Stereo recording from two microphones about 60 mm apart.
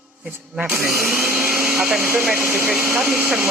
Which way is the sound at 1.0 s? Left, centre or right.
Right.